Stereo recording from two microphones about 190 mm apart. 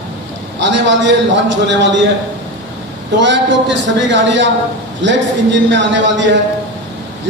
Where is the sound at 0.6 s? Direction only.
70° right (ahead or behind).